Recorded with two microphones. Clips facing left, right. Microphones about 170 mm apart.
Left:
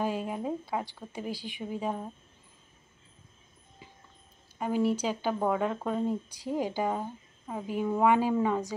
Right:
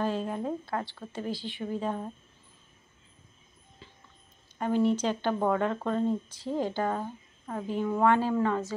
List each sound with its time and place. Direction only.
0.0 s speech: 10° left (ahead or behind)
3.8 s a sound: 15° left (ahead or behind)
4.6 s speech: 5° left (ahead or behind)